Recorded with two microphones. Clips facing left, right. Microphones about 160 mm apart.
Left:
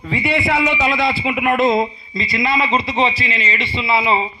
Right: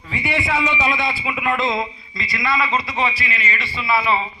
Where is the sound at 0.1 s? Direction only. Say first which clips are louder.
Left 4 dB; 35° left (ahead or behind).